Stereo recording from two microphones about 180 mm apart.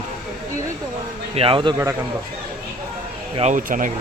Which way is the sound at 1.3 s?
30° right (ahead or behind).